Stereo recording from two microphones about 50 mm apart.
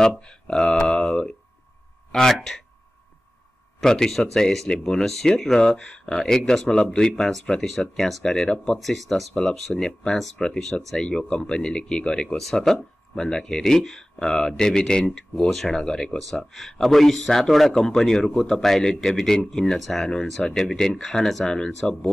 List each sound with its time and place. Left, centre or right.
0.2 s speech: centre
3.8 s speech: centre
12.4 s speech: centre